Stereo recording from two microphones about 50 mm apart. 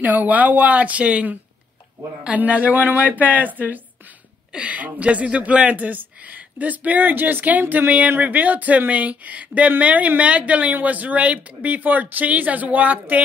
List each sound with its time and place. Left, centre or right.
0.0 s speech: right
4.5 s speech: right